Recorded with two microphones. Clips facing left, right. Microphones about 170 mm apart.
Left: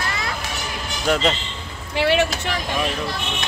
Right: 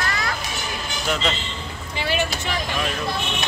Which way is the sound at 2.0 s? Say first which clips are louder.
Left 6 dB; 70° left (ahead or behind).